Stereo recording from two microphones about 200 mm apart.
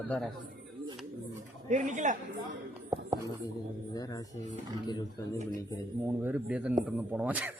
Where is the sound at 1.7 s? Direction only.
35° right (ahead or behind).